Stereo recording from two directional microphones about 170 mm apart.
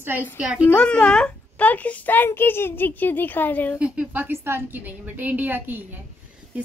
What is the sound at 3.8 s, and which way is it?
A woman's voice, 10° right (ahead or behind).